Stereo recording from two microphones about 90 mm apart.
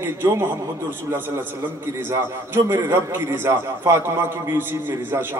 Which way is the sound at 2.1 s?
25° right (ahead or behind).